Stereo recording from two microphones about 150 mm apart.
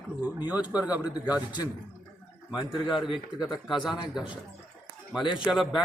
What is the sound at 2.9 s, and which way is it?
Speech, centre (ahead or behind).